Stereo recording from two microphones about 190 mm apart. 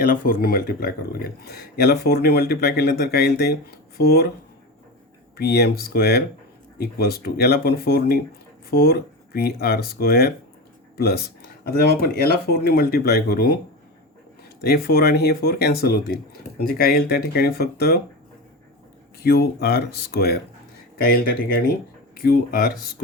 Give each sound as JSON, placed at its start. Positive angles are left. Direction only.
{"t": 0.0, "sound": "speech", "side_deg": 45}
{"t": 5.4, "sound": "speech", "side_deg": 60}
{"t": 14.6, "sound": "speech", "side_deg": 55}
{"t": 19.2, "sound": "speech", "side_deg": 55}